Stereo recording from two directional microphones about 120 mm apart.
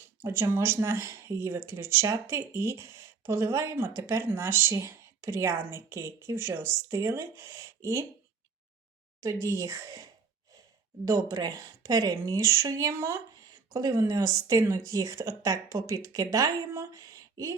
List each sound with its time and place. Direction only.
0.0 s speech: 20° right (ahead or behind)
9.2 s speech: 25° right (ahead or behind)